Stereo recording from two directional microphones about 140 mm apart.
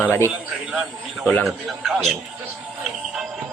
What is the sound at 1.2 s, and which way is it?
Speech, 10° left (ahead or behind).